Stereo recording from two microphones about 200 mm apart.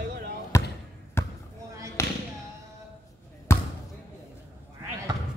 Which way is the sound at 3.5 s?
15° left (ahead or behind).